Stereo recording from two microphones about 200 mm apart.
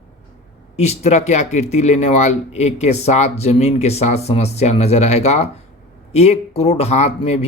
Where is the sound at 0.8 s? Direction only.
35° left (ahead or behind).